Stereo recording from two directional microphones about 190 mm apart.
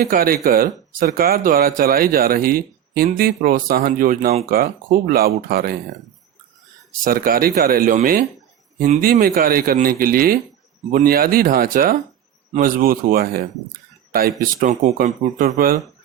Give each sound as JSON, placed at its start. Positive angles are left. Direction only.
{"t": 0.0, "sound": "speech", "side_deg": -50}
{"t": 7.0, "sound": "speech", "side_deg": -50}